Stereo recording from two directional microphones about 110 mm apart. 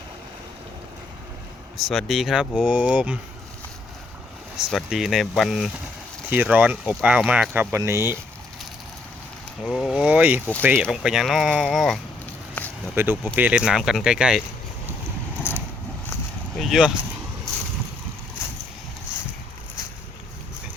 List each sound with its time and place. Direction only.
1.9 s speech: centre (ahead or behind)
4.7 s speech: centre (ahead or behind)
6.3 s speech: 15° right (ahead or behind)
9.6 s speech: centre (ahead or behind)
10.0 s speech: 15° right (ahead or behind)
11.0 s speech: 5° right (ahead or behind)
12.6 s a sound: 15° left (ahead or behind)
13.0 s speech: 20° right (ahead or behind); by 14.4 s 5° right (ahead or behind)
15.5 s vehicle: 20° left (ahead or behind)
16.6 s vehicle: 5° right (ahead or behind)